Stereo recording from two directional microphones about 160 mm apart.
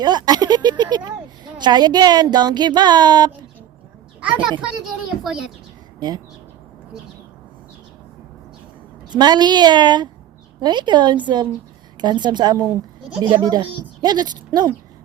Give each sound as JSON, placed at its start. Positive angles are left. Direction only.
{"t": 0.0, "sound": "speech", "side_deg": -25}
{"t": 4.2, "sound": "a child's voice", "side_deg": -10}
{"t": 6.0, "sound": "speech", "side_deg": -25}
{"t": 9.1, "sound": "speech", "side_deg": -25}